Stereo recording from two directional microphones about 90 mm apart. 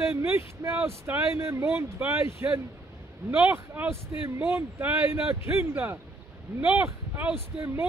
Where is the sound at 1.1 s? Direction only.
25° right (ahead or behind).